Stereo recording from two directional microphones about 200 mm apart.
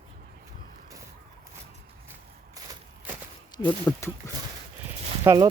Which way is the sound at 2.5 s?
15° right (ahead or behind).